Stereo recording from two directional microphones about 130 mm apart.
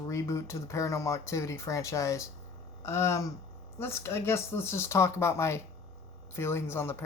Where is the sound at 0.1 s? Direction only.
25° left (ahead or behind).